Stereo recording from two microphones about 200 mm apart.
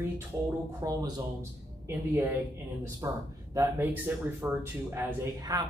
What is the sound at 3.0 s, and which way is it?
Speech, 15° right (ahead or behind).